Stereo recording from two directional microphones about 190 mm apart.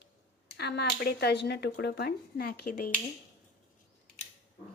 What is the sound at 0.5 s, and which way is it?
Speech, 60° left (ahead or behind).